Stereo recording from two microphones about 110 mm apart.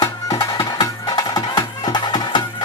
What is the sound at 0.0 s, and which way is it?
Music, 35° left (ahead or behind).